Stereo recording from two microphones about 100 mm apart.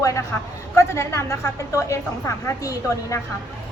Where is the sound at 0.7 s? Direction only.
30° left (ahead or behind).